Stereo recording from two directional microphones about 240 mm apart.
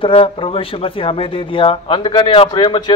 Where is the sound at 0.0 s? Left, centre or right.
Left.